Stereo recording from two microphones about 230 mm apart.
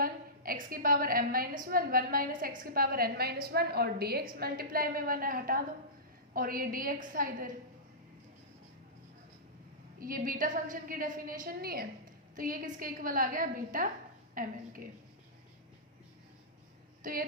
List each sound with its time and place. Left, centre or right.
0.0 s a woman's voice: right
10.0 s a woman's voice: right
17.0 s a woman's voice: right